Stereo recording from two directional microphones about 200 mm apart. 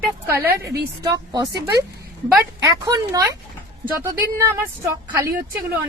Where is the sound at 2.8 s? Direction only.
20° right (ahead or behind).